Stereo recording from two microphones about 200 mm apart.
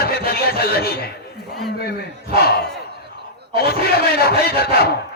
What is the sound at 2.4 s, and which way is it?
Speech, 50° left (ahead or behind).